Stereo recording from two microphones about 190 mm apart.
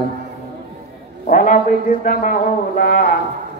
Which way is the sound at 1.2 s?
45° left (ahead or behind).